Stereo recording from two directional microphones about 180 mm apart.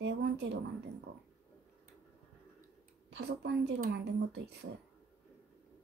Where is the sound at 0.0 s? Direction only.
70° right (ahead or behind).